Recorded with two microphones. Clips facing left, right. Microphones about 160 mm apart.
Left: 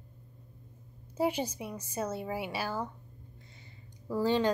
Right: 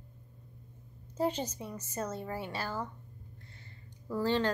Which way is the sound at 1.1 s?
10° left (ahead or behind).